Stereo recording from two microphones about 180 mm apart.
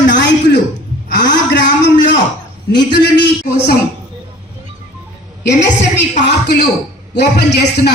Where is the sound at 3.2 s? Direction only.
70° left (ahead or behind).